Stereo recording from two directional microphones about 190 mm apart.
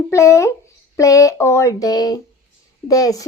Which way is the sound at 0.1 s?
15° left (ahead or behind).